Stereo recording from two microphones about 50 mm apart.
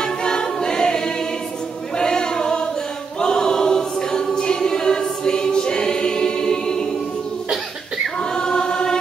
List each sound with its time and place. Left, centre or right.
0.0 s choir: centre
8.2 s choir: centre